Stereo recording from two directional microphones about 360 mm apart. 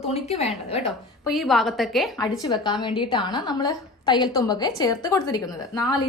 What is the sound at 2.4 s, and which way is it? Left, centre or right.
A woman's voice, centre.